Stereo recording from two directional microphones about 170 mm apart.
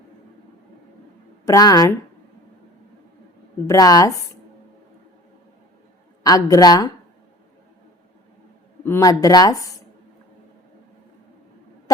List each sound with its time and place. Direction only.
1.5 s speech: 20° left (ahead or behind)
3.7 s speech: 20° left (ahead or behind)
6.2 s speech: 20° left (ahead or behind)
8.8 s speech: 15° left (ahead or behind)